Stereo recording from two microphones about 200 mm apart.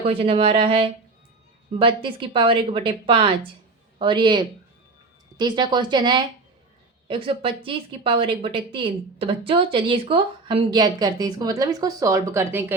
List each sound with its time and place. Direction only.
0.1 s speech: 30° right (ahead or behind); by 12.7 s 10° right (ahead or behind)